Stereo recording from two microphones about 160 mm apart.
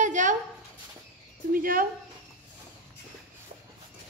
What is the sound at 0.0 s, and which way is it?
Dog, 50° right (ahead or behind).